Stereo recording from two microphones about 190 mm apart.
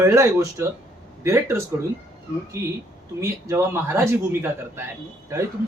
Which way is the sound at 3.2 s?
15° right (ahead or behind).